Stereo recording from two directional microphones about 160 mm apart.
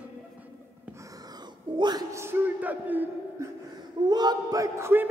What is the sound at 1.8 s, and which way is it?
A man's voice, 25° right (ahead or behind).